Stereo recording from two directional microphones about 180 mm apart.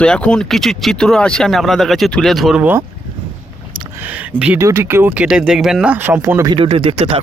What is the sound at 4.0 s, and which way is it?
Speech, 10° right (ahead or behind).